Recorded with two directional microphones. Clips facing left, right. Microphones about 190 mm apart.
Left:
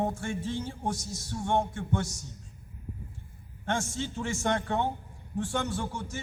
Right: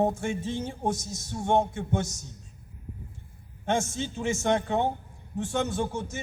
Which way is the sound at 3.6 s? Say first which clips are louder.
Right 4 dB; 20° right (ahead or behind).